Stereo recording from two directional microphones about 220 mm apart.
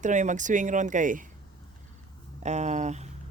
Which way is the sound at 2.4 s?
30° right (ahead or behind).